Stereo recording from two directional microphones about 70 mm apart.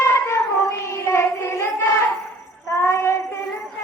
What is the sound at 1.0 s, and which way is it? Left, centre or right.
Child singing, left.